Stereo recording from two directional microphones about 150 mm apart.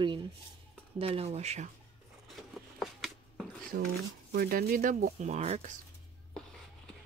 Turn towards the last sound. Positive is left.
turn(degrees=5)  # may be behind; listen again after turning